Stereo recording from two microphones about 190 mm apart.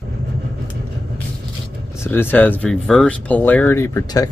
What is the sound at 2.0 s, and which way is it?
Speech, 10° left (ahead or behind).